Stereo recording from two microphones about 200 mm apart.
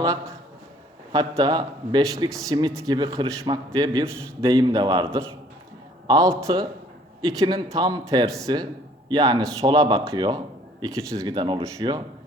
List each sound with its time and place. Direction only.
0.0 s a man's voice: 15° right (ahead or behind)